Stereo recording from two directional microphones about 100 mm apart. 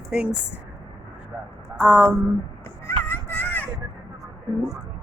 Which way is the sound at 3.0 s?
20° left (ahead or behind).